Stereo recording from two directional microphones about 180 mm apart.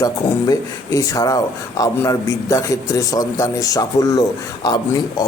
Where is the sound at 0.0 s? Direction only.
20° left (ahead or behind).